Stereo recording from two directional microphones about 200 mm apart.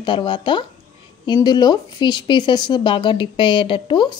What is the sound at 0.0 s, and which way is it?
Speech, 25° left (ahead or behind).